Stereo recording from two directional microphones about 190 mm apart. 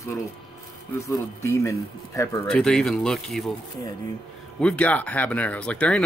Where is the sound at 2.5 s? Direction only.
5° left (ahead or behind).